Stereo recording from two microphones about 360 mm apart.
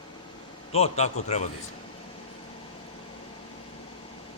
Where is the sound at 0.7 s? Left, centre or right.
Centre.